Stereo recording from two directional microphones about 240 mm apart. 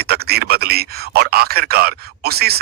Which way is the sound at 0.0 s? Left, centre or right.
Right.